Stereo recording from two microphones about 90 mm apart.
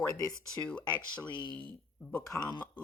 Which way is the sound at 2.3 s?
35° left (ahead or behind).